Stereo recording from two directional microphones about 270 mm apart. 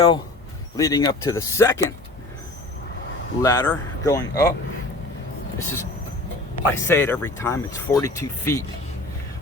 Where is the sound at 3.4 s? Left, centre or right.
Centre.